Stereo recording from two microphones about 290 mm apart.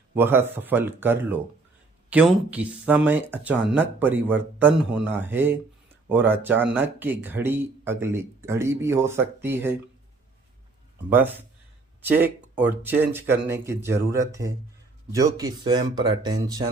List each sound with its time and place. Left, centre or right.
0.1 s speech: centre
12.0 s speech: centre